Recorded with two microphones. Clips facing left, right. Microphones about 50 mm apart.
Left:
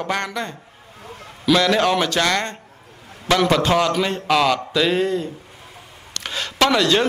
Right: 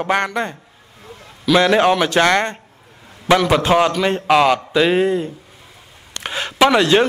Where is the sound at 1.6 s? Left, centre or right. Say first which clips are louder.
Right 6 dB; right.